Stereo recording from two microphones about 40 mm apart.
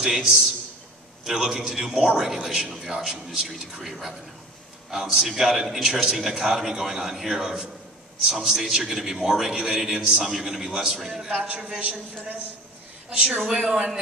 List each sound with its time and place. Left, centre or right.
0.1 s a man's voice: centre
11.4 s a man's voice: right
13.5 s a man's voice: centre